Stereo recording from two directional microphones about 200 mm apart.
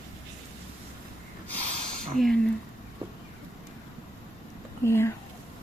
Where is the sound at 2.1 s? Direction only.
Centre (ahead or behind).